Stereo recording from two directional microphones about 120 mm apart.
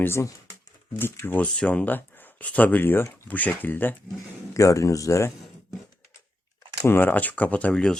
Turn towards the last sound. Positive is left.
turn(degrees=10)  # may be behind; listen again after turning